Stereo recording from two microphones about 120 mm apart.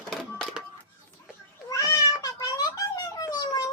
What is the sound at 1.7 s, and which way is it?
Cat, 25° left (ahead or behind).